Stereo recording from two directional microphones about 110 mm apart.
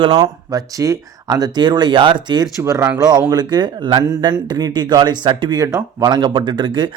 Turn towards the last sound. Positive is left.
turn(degrees=-45)  # may be behind; listen again after turning